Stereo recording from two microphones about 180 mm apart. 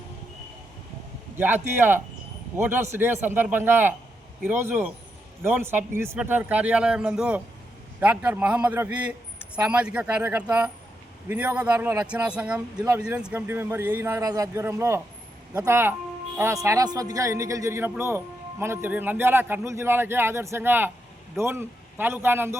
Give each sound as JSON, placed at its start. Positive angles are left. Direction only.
{"t": 1.4, "sound": "a man's voice", "side_deg": -10}